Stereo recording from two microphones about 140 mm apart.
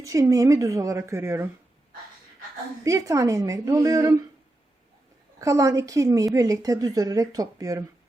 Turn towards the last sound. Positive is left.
turn(degrees=-25)  # may be behind; listen again after turning